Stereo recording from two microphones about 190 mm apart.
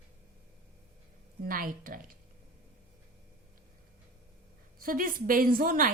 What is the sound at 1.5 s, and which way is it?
Speech, 45° right (ahead or behind).